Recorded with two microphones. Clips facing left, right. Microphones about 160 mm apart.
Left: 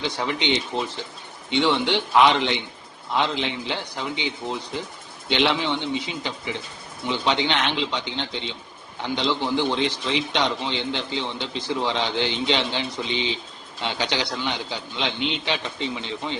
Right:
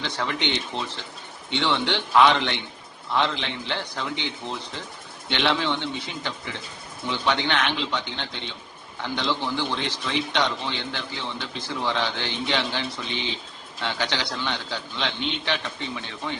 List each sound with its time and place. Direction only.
0.0 s a man's voice: 15° left (ahead or behind)